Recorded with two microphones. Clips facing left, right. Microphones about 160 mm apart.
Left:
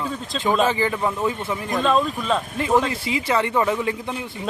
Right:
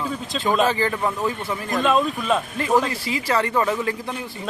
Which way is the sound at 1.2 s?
25° left (ahead or behind).